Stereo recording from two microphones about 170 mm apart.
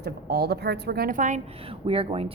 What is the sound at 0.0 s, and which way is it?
A woman's voice, 70° right (ahead or behind).